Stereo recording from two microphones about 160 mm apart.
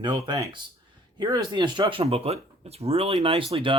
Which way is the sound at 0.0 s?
25° right (ahead or behind).